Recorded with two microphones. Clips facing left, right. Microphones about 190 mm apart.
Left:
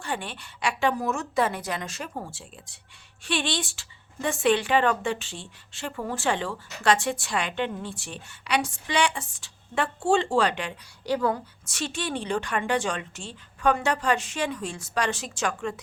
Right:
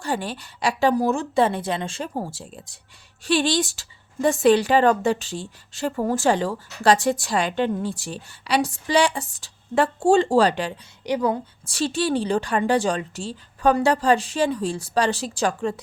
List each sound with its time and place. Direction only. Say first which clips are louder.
0.0 s speech: right 6 dB; 40° right (ahead or behind)
11.0 s a woman's voice: right 3 dB; 20° right (ahead or behind)
11.6 s speech: right 11 dB; 35° right (ahead or behind)